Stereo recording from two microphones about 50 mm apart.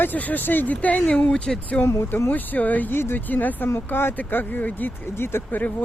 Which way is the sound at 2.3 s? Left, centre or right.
Left.